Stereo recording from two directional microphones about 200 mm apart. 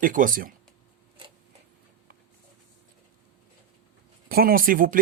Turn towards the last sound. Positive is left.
turn(degrees=-45)  # may be behind; listen again after turning